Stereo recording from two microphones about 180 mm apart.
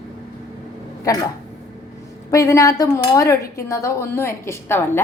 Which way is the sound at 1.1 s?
20° left (ahead or behind).